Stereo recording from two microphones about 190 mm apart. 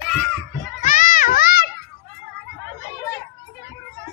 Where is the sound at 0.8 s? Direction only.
45° left (ahead or behind).